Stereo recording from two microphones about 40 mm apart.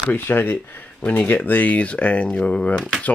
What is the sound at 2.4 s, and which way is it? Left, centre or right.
Speech, left.